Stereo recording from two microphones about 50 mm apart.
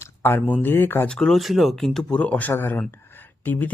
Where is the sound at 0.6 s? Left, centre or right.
Left.